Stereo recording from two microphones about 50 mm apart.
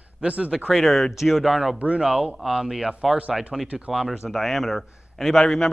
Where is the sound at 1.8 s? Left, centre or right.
Right.